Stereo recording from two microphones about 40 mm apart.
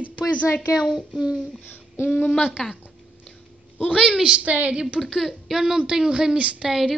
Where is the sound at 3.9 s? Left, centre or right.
Centre.